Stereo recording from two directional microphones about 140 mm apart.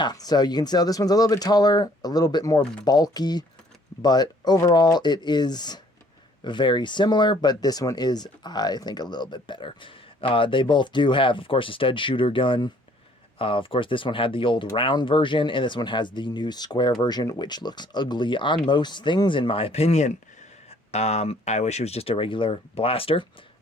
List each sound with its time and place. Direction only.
0.0 s speech: 30° left (ahead or behind)